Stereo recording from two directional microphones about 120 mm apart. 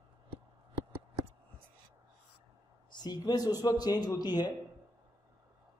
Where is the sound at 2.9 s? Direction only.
35° left (ahead or behind).